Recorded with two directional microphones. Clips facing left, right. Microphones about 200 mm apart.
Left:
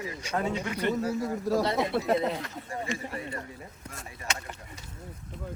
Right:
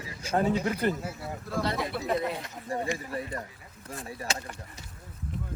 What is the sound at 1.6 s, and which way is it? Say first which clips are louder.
Speech: left 3 dB; 25° left (ahead or behind).